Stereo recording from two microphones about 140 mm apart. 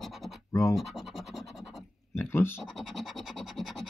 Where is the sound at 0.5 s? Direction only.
20° left (ahead or behind).